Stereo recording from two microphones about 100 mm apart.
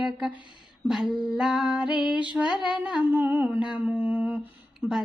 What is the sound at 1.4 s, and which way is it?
Music, 5° right (ahead or behind).